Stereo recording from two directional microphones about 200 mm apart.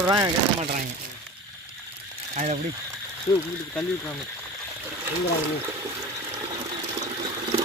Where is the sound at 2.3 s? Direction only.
35° right (ahead or behind).